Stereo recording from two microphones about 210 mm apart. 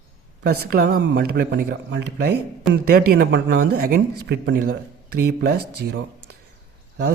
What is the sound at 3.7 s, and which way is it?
Speech, 45° right (ahead or behind).